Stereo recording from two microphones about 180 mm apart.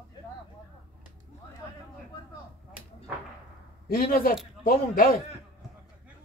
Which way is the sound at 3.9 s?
55° left (ahead or behind).